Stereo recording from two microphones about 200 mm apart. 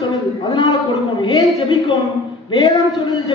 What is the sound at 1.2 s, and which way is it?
A woman's voice, 20° left (ahead or behind).